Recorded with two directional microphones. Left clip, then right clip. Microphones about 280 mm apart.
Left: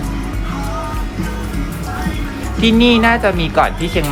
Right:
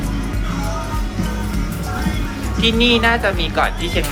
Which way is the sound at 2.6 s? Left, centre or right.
Left.